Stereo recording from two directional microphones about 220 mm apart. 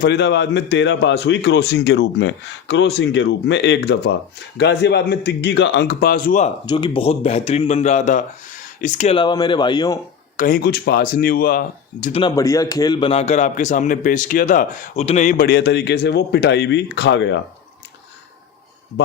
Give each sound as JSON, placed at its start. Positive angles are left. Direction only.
{"t": 0.0, "sound": "a man's voice", "side_deg": 50}
{"t": 6.7, "sound": "speech", "side_deg": 20}
{"t": 9.1, "sound": "speech", "side_deg": 20}
{"t": 10.3, "sound": "a man's voice", "side_deg": 40}
{"t": 12.2, "sound": "a man's voice", "side_deg": 15}
{"t": 15.4, "sound": "a man's voice", "side_deg": 50}